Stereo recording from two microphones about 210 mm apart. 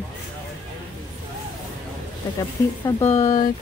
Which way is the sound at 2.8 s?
15° left (ahead or behind).